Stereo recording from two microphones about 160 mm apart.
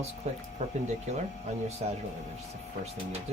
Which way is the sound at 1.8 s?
45° right (ahead or behind).